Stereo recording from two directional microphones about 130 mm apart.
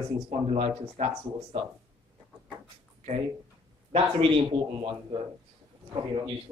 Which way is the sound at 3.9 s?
45° right (ahead or behind).